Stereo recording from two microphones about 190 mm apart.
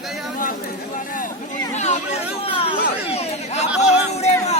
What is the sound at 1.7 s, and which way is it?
Speech, 35° left (ahead or behind).